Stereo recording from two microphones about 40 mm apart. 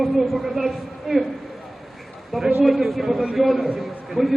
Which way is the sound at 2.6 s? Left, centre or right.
Centre.